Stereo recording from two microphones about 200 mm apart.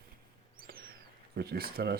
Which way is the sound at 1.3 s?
50° right (ahead or behind).